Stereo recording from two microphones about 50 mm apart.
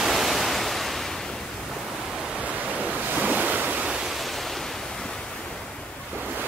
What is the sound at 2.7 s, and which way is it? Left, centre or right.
Waves, right.